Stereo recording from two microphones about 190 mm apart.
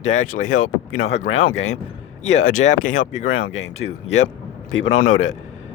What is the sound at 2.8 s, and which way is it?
Speech, 40° left (ahead or behind).